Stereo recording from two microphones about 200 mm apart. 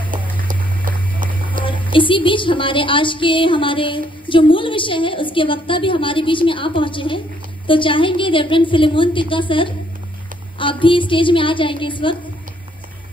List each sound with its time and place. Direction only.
0.4 s music: 45° right (ahead or behind)
1.6 s a woman's voice: 25° left (ahead or behind)